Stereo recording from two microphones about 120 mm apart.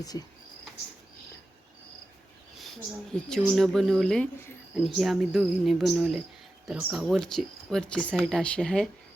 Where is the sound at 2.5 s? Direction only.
Centre (ahead or behind).